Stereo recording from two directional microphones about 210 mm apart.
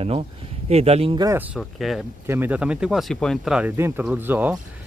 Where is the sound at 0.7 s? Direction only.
30° right (ahead or behind); by 4.6 s 10° right (ahead or behind).